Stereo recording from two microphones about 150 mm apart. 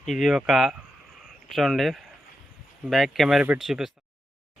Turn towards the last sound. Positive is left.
turn(degrees=0)  # may be behind; listen again after turning